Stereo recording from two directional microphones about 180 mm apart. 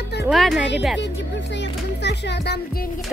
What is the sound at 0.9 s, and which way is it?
Speech, 75° left (ahead or behind).